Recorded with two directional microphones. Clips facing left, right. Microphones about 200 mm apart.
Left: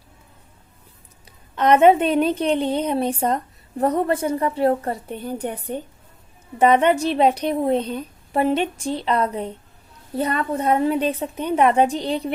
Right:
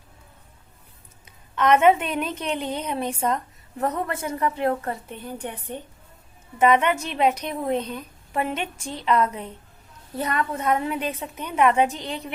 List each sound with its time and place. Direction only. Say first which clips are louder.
1.5 s a woman's voice: left 3 dB; 35° left (ahead or behind)